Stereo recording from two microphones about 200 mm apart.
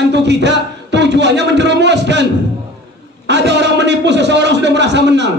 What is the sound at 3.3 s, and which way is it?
A man's voice, 60° right (ahead or behind).